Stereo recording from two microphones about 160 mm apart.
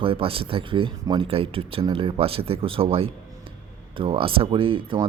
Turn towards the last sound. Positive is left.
turn(degrees=-35)  # may be behind; listen again after turning